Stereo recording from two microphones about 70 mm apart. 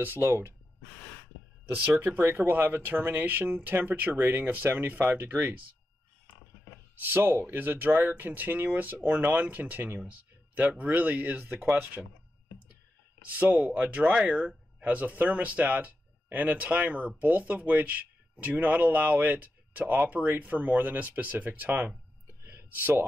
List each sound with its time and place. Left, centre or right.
0.0 s speech: right
1.9 s speech: right
7.0 s speech: right
13.3 s speech: right
22.4 s a sound: right